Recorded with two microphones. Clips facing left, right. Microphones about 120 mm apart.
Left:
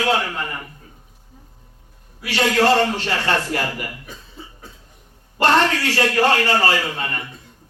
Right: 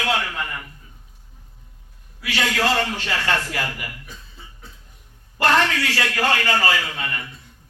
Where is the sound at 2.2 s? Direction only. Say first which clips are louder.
Left 5 dB; 35° left (ahead or behind).